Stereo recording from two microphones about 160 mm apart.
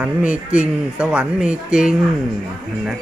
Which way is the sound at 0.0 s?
10° right (ahead or behind).